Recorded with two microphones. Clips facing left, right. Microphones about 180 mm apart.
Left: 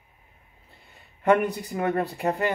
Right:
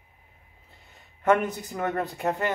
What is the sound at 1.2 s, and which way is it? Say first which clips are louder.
Speech: left 2 dB; 10° left (ahead or behind).